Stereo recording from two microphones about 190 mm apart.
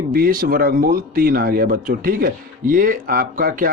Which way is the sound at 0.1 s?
50° right (ahead or behind).